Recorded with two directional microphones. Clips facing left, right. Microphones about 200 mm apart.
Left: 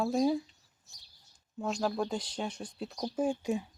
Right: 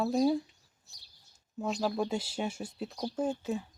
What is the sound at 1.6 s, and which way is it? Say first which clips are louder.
Speech: right 1 dB; 5° right (ahead or behind).